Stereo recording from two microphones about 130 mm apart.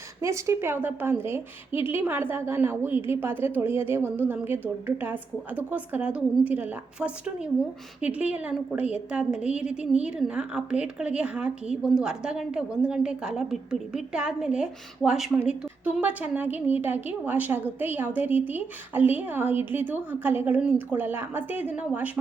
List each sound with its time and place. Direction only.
0.2 s a woman's voice: 25° right (ahead or behind)